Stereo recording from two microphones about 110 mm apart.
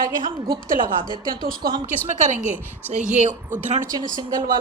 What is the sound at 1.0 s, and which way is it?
Speech, 40° left (ahead or behind).